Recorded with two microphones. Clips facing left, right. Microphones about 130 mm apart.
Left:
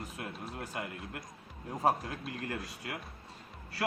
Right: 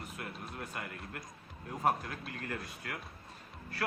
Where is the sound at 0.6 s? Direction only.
30° left (ahead or behind).